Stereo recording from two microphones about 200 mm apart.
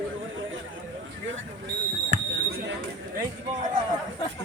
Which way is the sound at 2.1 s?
65° right (ahead or behind).